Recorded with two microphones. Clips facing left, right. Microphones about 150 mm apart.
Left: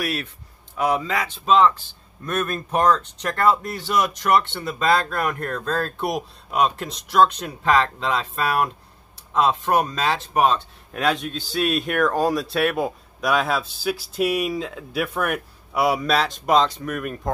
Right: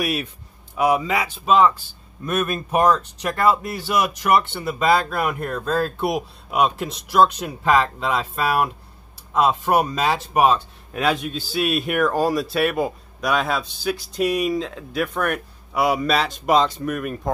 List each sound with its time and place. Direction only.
0.0 s speech: 15° right (ahead or behind)